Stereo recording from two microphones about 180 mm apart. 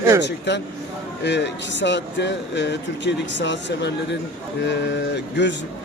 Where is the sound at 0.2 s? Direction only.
70° left (ahead or behind).